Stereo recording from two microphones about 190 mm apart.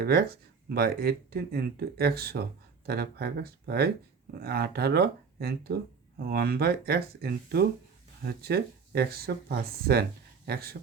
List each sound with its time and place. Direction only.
0.0 s speech: 55° right (ahead or behind)